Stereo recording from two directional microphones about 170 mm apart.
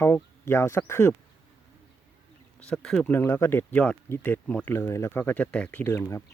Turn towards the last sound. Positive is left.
turn(degrees=15)  # may be behind; listen again after turning